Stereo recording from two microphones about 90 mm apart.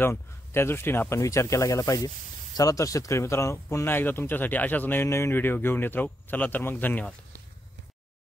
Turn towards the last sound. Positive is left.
turn(degrees=20)  # may be behind; listen again after turning